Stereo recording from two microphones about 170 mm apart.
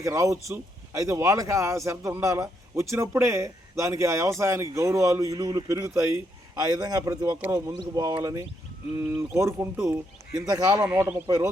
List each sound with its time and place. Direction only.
0.0 s speech: 20° right (ahead or behind)